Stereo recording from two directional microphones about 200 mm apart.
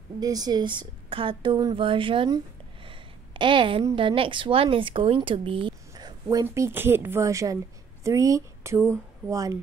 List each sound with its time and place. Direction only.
0.2 s a woman's voice: 20° right (ahead or behind)